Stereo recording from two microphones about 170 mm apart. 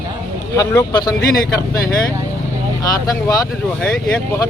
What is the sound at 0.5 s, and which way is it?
Speech, 20° left (ahead or behind).